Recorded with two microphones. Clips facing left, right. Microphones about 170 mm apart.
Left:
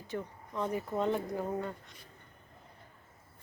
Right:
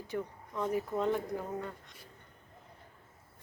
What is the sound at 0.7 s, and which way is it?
Speech, centre (ahead or behind).